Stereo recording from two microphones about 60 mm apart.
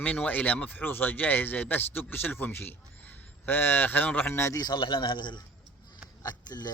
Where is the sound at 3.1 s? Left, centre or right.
Left.